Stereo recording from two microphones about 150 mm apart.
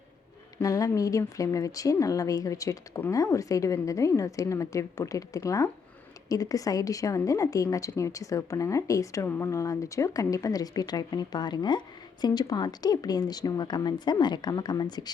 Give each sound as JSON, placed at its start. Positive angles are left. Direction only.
{"t": 0.6, "sound": "a woman's voice", "side_deg": 20}